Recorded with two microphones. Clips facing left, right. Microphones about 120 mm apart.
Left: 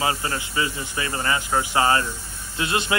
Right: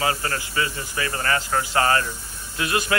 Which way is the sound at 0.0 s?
20° left (ahead or behind).